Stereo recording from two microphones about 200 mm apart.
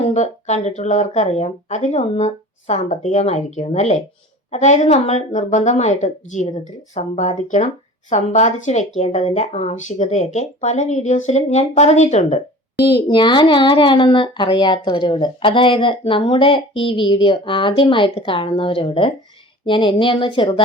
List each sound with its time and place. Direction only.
0.0 s speech: 35° left (ahead or behind)
12.8 s speech: 25° left (ahead or behind)